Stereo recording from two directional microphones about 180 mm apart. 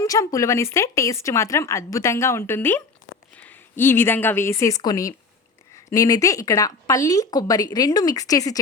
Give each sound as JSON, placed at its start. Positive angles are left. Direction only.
{"t": 0.0, "sound": "a woman's voice", "side_deg": 20}